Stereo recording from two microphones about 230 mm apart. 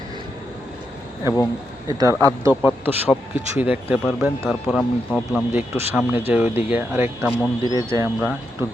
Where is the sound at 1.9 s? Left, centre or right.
Centre.